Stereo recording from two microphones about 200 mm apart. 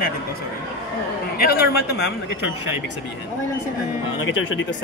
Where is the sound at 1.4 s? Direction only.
50° left (ahead or behind).